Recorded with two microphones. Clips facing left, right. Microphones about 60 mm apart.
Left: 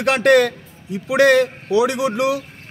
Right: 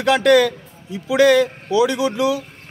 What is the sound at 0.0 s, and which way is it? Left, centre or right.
A man's voice, left.